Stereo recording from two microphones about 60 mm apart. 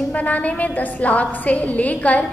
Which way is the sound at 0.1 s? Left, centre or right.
Left.